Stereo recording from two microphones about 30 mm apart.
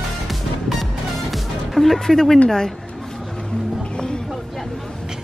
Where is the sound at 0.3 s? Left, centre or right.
Centre.